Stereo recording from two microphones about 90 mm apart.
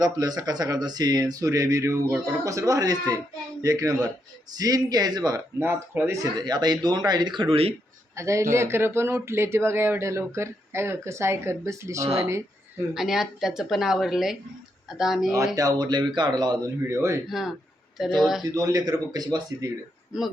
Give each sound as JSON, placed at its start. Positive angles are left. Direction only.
{"t": 0.0, "sound": "speech", "side_deg": -45}
{"t": 5.5, "sound": "speech", "side_deg": -25}
{"t": 6.3, "sound": "speech", "side_deg": -50}
{"t": 8.1, "sound": "speech", "side_deg": -35}
{"t": 12.9, "sound": "speech", "side_deg": -5}
{"t": 15.5, "sound": "speech", "side_deg": -45}
{"t": 16.9, "sound": "speech", "side_deg": -30}
{"t": 17.2, "sound": "speech", "side_deg": -5}
{"t": 18.5, "sound": "speech", "side_deg": -40}